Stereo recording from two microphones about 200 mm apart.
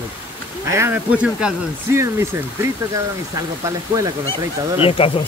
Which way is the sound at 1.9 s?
15° right (ahead or behind).